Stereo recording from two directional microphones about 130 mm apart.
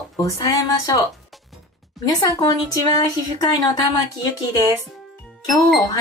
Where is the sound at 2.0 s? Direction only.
30° left (ahead or behind).